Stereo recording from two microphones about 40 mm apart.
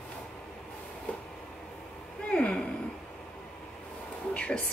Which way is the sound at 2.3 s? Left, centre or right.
Left.